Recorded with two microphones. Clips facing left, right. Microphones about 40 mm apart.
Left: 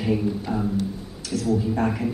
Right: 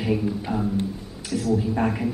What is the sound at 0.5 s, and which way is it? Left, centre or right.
Speech, centre.